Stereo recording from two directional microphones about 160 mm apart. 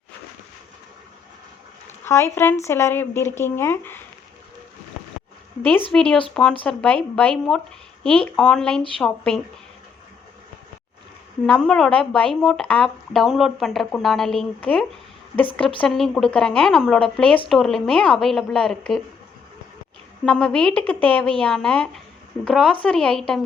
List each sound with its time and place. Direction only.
2.0 s speech: 15° left (ahead or behind)
5.9 s speech: 5° left (ahead or behind)
11.4 s speech: 5° left (ahead or behind)
20.2 s speech: 5° left (ahead or behind)